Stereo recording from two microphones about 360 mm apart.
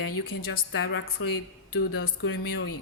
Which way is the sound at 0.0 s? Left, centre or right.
Left.